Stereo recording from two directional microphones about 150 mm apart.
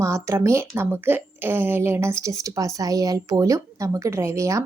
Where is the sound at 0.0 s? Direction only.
20° right (ahead or behind).